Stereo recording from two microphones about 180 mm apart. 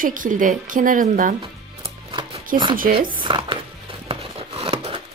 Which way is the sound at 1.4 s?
30° right (ahead or behind).